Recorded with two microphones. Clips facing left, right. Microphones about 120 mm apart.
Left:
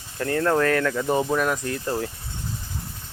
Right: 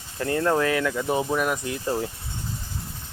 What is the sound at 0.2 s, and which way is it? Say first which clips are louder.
Speech: left 1 dB; 20° right (ahead or behind).